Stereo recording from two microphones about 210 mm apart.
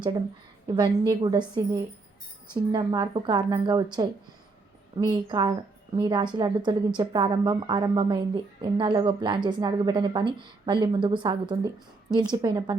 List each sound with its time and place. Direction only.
0.7 s a woman's voice: 20° right (ahead or behind)
4.9 s a woman's voice: 20° right (ahead or behind)